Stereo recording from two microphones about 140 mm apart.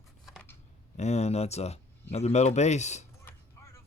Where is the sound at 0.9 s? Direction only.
50° left (ahead or behind).